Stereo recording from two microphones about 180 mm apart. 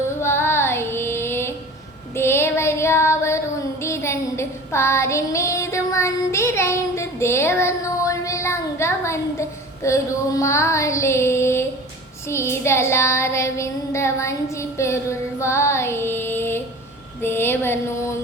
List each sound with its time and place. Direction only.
0.2 s female singing: 15° left (ahead or behind)
2.1 s child singing: 15° left (ahead or behind)